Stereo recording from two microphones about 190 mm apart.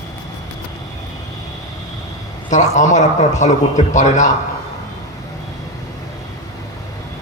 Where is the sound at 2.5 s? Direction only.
40° left (ahead or behind).